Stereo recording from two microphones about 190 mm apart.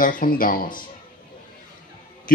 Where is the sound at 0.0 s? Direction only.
45° left (ahead or behind).